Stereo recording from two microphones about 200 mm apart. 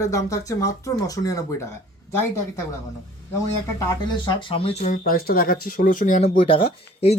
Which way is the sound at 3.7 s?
15° left (ahead or behind).